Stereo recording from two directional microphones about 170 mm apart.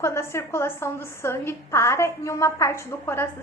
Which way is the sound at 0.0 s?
15° left (ahead or behind).